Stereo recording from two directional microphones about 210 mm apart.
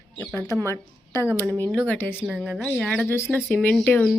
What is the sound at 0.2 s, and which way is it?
A woman's voice, 10° left (ahead or behind).